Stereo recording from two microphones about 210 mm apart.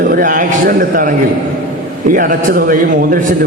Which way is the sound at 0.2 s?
40° right (ahead or behind).